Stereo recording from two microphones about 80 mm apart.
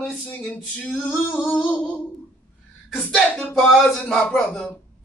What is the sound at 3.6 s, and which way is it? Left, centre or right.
Music, centre.